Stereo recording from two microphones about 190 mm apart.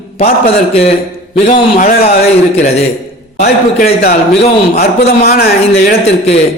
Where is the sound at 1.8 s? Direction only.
50° left (ahead or behind).